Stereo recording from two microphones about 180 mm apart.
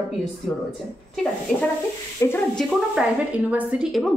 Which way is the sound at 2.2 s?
15° left (ahead or behind).